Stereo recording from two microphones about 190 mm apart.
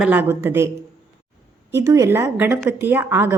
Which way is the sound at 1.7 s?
15° right (ahead or behind).